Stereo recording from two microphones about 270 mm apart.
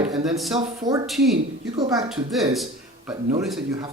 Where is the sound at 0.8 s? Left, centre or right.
Centre.